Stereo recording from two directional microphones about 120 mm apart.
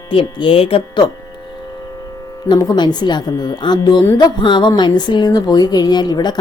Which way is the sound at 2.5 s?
35° left (ahead or behind).